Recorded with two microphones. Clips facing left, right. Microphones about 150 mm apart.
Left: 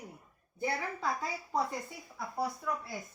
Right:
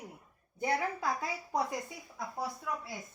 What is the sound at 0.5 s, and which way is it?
Speech, 20° right (ahead or behind).